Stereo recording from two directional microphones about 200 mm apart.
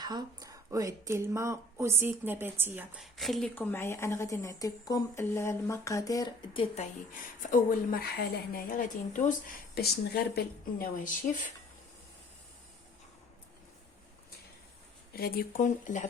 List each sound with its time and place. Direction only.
0.0 s speech: 20° right (ahead or behind); by 6.8 s 25° left (ahead or behind)
7.1 s speech: 40° left (ahead or behind)
15.1 s speech: 50° left (ahead or behind)